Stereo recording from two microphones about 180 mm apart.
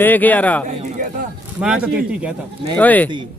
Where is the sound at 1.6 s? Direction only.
5° right (ahead or behind).